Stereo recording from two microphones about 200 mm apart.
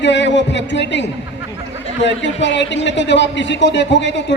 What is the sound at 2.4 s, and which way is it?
A man's voice, 65° left (ahead or behind).